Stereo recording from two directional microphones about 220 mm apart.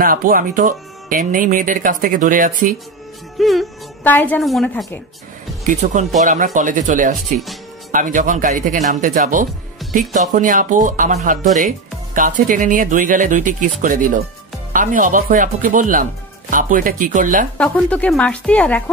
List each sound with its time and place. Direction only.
0.0 s speech: 40° right (ahead or behind)
3.3 s a woman's voice: centre (ahead or behind)
5.6 s speech: 30° right (ahead or behind)
17.6 s a woman's voice: 5° left (ahead or behind)